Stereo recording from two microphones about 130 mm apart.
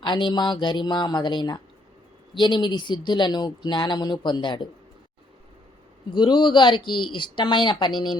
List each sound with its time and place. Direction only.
0.0 s speech: 35° left (ahead or behind)
6.1 s speech: 35° left (ahead or behind)